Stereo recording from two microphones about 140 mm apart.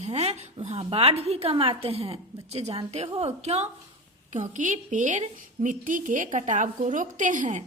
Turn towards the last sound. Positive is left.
turn(degrees=-65)  # may be behind; listen again after turning